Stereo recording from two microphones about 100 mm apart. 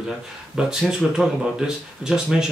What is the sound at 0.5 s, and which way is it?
Speech, 5° right (ahead or behind).